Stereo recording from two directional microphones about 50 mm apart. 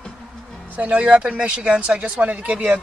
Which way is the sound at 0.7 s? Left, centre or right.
Right.